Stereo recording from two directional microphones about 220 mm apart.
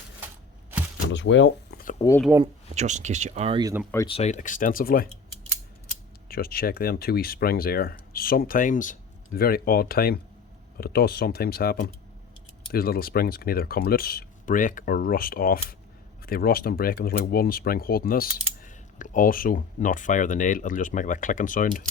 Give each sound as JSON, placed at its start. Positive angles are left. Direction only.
{"t": 1.0, "sound": "speech", "side_deg": 55}
{"t": 1.8, "sound": "a sound", "side_deg": 35}
{"t": 2.3, "sound": "speech", "side_deg": -10}
{"t": 2.7, "sound": "speech", "side_deg": -35}
{"t": 3.9, "sound": "speech", "side_deg": 25}
{"t": 6.2, "sound": "speech", "side_deg": 45}